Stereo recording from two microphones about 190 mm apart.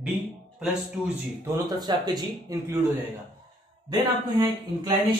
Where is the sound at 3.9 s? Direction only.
25° right (ahead or behind).